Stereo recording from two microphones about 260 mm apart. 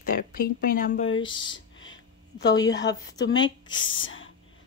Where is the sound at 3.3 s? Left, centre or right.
Left.